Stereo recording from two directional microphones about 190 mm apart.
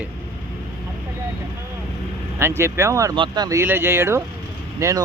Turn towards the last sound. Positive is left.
turn(degrees=-15)  # may be behind; listen again after turning